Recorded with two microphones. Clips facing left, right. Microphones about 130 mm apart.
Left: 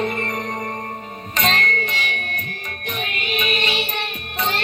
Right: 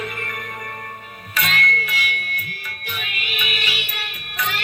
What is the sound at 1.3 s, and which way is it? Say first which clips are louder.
Music: left 2 dB; 35° left (ahead or behind).